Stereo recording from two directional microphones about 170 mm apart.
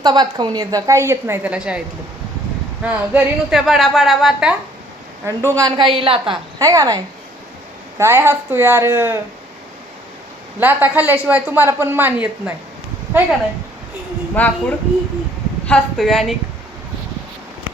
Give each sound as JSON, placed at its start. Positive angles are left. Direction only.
{"t": 0.0, "sound": "a woman's voice", "side_deg": -25}
{"t": 2.8, "sound": "a woman's voice", "side_deg": -10}
{"t": 5.2, "sound": "a woman's voice", "side_deg": -15}
{"t": 10.6, "sound": "a woman's voice", "side_deg": -10}
{"t": 14.4, "sound": "speech", "side_deg": 10}
{"t": 15.6, "sound": "a woman's voice", "side_deg": 5}